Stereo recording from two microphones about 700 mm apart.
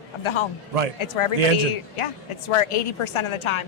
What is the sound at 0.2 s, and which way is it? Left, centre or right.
A man's voice, left.